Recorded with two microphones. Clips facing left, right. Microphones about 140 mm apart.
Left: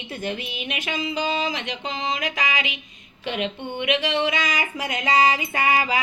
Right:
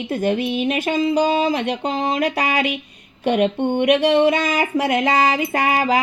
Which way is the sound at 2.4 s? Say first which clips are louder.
Right 7 dB; 55° right (ahead or behind).